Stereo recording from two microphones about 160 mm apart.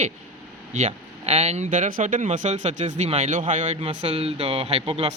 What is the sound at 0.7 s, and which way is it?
Speech, 40° right (ahead or behind).